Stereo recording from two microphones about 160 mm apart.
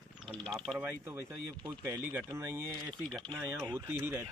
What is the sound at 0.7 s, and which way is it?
Speech, 10° right (ahead or behind).